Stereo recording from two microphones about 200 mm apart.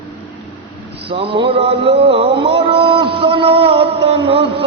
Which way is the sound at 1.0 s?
30° right (ahead or behind).